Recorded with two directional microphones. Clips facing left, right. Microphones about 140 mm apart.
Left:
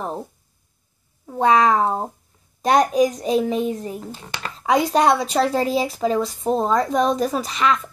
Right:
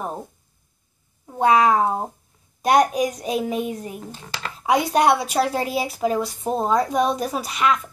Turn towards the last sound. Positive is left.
turn(degrees=-10)  # may be behind; listen again after turning